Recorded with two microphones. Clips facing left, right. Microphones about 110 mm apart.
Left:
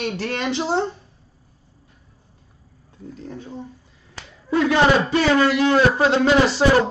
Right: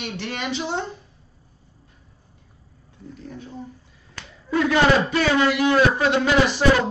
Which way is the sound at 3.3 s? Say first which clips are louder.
Left 3 dB; 30° left (ahead or behind).